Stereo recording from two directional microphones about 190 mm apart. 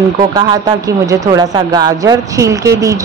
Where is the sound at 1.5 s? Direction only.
20° right (ahead or behind).